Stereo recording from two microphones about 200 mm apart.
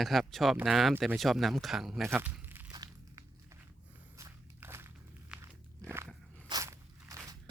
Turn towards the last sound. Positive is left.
turn(degrees=-15)  # may be behind; listen again after turning